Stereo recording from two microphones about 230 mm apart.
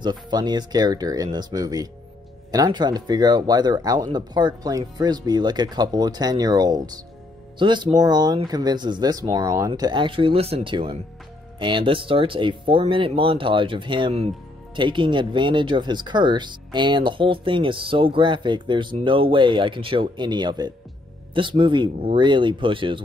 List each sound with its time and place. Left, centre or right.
0.0 s speech: centre